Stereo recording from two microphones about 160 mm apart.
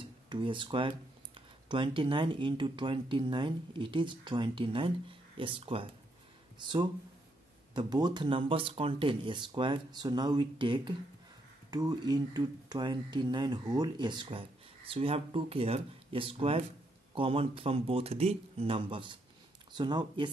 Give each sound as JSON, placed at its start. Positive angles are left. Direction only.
{"t": 0.3, "sound": "speech", "side_deg": -30}